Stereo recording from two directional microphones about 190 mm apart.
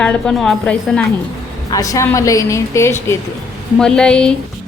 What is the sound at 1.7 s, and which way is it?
A woman's voice, 20° left (ahead or behind).